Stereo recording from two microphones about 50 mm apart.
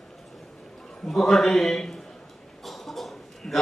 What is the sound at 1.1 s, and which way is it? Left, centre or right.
Speech, centre.